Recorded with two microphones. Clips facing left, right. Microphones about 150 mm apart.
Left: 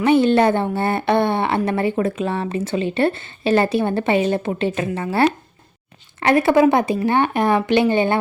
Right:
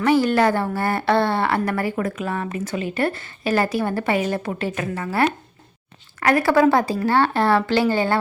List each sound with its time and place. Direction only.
0.0 s a woman's voice: 25° left (ahead or behind)